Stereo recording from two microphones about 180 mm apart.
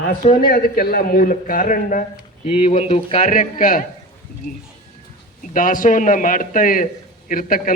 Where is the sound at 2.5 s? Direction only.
30° left (ahead or behind).